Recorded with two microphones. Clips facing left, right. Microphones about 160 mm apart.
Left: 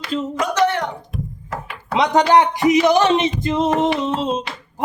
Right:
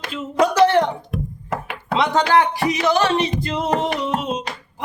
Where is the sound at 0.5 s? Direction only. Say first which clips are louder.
Right 3 dB; 30° right (ahead or behind).